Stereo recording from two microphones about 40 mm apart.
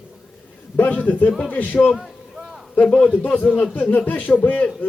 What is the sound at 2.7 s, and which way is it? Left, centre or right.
Speech, left.